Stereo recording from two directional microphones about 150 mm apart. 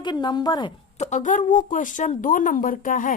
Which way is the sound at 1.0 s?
55° left (ahead or behind).